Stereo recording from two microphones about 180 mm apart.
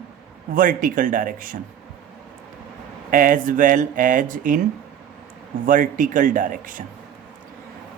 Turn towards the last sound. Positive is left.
turn(degrees=-50)  # may be behind; listen again after turning